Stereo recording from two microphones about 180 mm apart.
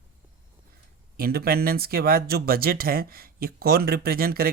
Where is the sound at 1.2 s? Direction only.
55° right (ahead or behind).